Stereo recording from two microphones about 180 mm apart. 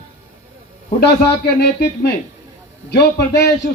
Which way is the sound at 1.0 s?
65° left (ahead or behind).